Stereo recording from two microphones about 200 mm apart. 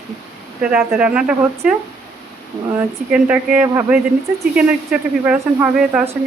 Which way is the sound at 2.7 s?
5° right (ahead or behind).